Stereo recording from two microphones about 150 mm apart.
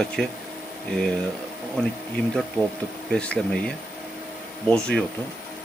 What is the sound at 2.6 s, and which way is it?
Speech, 10° left (ahead or behind).